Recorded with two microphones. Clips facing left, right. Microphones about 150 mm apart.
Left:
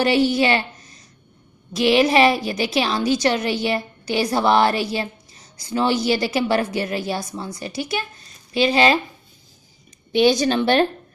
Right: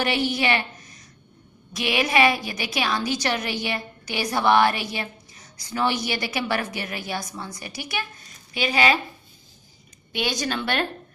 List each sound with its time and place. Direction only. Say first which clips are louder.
0.0 s a woman's voice: left 6 dB; 30° left (ahead or behind)
10.1 s a woman's voice: left 10 dB; 30° left (ahead or behind)